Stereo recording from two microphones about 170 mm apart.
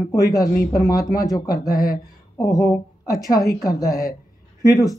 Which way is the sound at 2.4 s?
20° left (ahead or behind).